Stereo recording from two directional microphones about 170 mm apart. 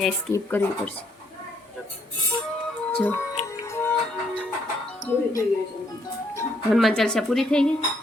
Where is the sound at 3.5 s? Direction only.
15° left (ahead or behind).